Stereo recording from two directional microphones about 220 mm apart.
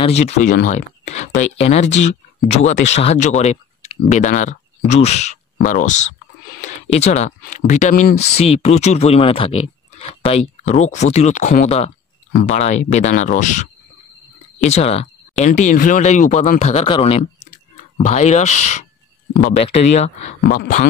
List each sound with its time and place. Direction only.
0.0 s speech: 30° left (ahead or behind)
20.3 s speech: 40° left (ahead or behind)